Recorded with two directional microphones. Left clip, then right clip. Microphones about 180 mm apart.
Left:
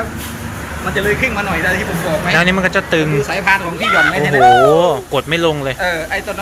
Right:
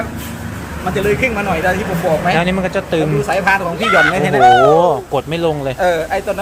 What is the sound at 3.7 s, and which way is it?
Speech, centre (ahead or behind).